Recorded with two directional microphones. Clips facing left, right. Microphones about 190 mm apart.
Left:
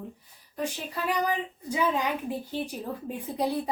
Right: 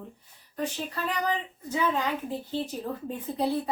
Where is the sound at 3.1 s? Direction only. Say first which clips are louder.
Even; 15° left (ahead or behind).